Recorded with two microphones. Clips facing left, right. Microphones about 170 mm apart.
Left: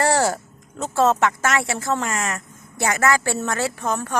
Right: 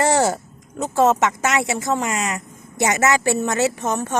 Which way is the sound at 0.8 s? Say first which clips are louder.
Right 2 dB; 15° right (ahead or behind).